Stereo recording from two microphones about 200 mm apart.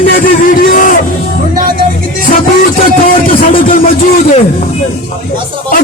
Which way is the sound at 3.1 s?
45° left (ahead or behind).